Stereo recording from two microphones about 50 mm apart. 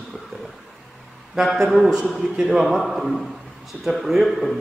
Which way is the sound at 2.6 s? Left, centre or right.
Centre.